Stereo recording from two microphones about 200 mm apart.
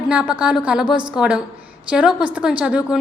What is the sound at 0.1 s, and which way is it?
A woman's voice, 5° right (ahead or behind).